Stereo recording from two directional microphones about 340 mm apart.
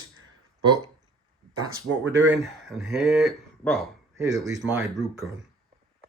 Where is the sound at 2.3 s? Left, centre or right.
Centre.